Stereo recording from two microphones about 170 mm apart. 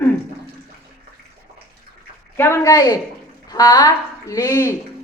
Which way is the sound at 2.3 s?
15° left (ahead or behind).